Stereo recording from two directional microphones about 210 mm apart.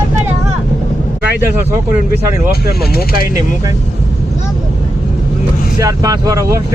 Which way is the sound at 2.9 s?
45° left (ahead or behind).